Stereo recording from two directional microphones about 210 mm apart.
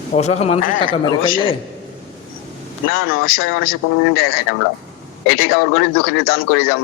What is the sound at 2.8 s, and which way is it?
Speech, 45° left (ahead or behind).